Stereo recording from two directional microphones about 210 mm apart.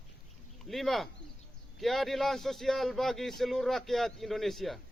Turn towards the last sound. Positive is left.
turn(degrees=0)  # may be behind; listen again after turning